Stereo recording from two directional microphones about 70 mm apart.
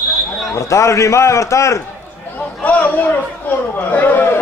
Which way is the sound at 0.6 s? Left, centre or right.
Left.